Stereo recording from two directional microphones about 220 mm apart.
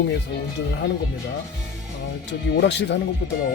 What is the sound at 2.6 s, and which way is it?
Speech, 55° left (ahead or behind).